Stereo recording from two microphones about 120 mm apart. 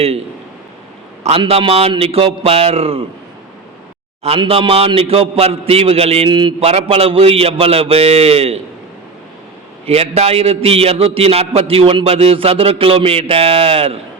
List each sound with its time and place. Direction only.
1.4 s a man's voice: 50° right (ahead or behind)
4.4 s a man's voice: 45° right (ahead or behind)
9.8 s a man's voice: 60° right (ahead or behind)